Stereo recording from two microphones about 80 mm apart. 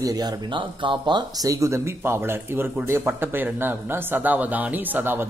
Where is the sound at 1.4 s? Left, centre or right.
Right.